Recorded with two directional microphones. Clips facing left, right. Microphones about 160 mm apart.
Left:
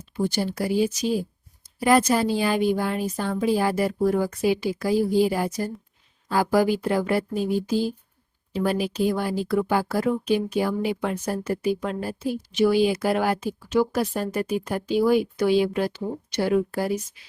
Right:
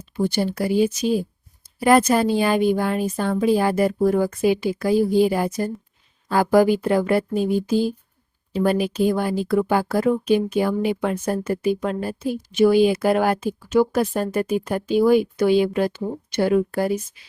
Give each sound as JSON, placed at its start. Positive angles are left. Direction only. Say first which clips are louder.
{"t": 0.0, "sound": "speech", "louder": "right 3 dB", "side_deg": -60}
{"t": 8.6, "sound": "speech", "louder": "right 4 dB", "side_deg": -55}